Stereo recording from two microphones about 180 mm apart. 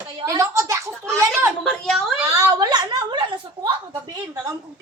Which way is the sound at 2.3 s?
15° right (ahead or behind).